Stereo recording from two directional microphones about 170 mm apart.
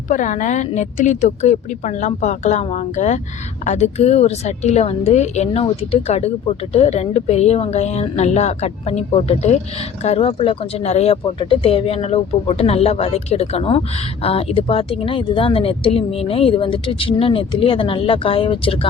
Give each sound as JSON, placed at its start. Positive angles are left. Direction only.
{"t": 0.1, "sound": "a woman's voice", "side_deg": 50}